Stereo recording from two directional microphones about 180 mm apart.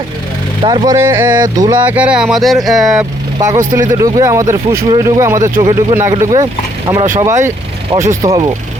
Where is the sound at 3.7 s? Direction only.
20° right (ahead or behind).